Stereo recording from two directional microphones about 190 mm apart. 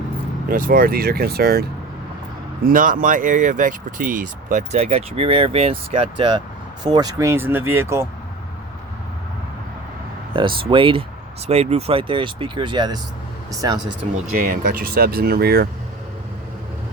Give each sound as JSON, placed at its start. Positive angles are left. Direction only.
{"t": 0.5, "sound": "speech", "side_deg": -50}
{"t": 2.6, "sound": "speech", "side_deg": -45}
{"t": 10.3, "sound": "speech", "side_deg": -25}
{"t": 14.3, "sound": "speech", "side_deg": -45}